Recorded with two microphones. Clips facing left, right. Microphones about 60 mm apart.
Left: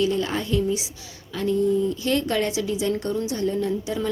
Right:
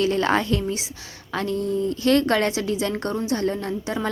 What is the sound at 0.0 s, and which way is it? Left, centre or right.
Speech, right.